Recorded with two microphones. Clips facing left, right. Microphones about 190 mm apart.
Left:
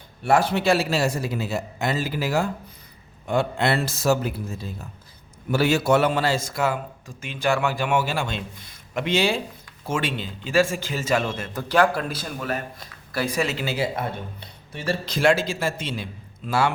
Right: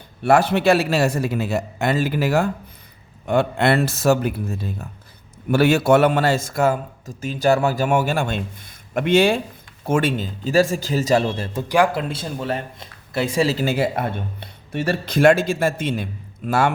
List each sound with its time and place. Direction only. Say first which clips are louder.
0.3 s a man's voice: right 4 dB; 65° right (ahead or behind); by 11.6 s 35° right (ahead or behind)
11.7 s speech: right 2 dB; 15° right (ahead or behind)
12.0 s speech: right 3 dB; 25° right (ahead or behind)
13.7 s a man's voice: right 5 dB; 60° right (ahead or behind)